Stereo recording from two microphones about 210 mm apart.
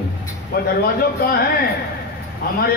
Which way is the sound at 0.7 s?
45° left (ahead or behind).